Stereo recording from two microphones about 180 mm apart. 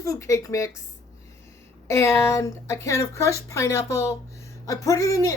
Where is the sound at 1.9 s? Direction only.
15° left (ahead or behind).